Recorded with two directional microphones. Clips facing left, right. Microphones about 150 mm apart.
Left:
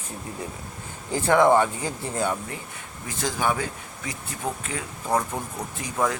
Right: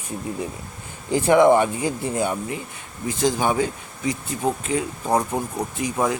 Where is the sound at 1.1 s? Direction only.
15° right (ahead or behind).